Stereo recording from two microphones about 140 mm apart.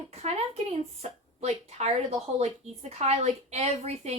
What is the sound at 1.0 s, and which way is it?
A woman's voice, 50° right (ahead or behind).